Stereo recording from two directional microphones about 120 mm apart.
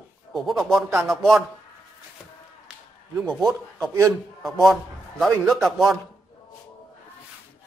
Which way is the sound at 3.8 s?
25° right (ahead or behind).